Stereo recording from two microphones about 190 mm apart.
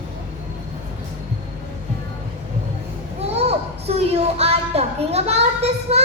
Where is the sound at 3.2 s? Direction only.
35° right (ahead or behind).